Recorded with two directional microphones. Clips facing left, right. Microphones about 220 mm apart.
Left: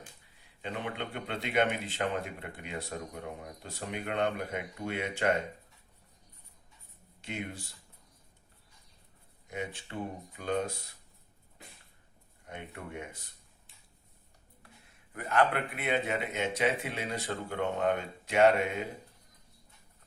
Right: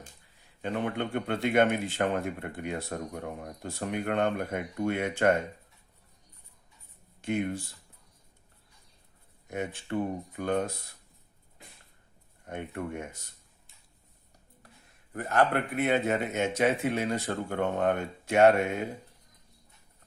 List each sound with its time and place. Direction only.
0.6 s speech: 50° right (ahead or behind)
7.2 s speech: 50° right (ahead or behind)
9.5 s speech: 50° right (ahead or behind)
12.5 s speech: 50° right (ahead or behind)
15.1 s speech: 45° right (ahead or behind)